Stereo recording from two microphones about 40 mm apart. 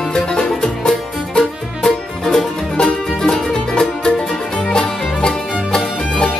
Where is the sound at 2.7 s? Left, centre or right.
Centre.